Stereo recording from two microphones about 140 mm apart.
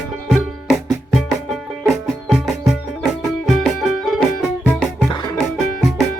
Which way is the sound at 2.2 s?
Centre (ahead or behind).